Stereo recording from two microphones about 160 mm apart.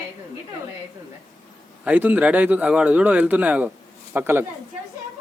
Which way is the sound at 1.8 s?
10° right (ahead or behind).